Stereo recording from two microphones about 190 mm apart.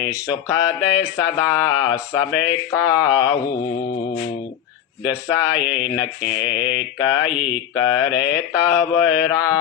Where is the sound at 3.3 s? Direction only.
20° left (ahead or behind).